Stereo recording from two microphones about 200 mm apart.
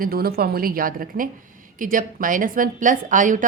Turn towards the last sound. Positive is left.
turn(degrees=-40)  # may be behind; listen again after turning